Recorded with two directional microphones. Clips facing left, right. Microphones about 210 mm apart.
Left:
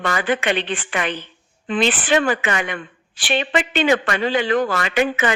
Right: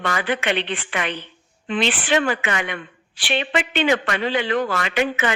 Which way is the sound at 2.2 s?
45° left (ahead or behind).